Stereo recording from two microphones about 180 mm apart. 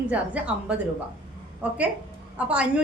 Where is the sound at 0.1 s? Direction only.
5° right (ahead or behind).